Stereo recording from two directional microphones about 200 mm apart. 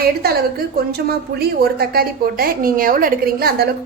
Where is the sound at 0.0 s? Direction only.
50° right (ahead or behind).